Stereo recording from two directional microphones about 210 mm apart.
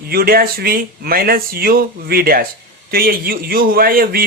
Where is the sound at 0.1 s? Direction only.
45° right (ahead or behind).